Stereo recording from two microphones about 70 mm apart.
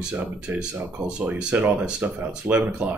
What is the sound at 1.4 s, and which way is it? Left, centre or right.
Speech, centre.